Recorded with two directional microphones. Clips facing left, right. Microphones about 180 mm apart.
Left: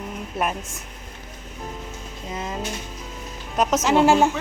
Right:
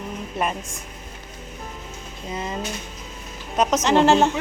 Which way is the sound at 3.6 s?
5° left (ahead or behind).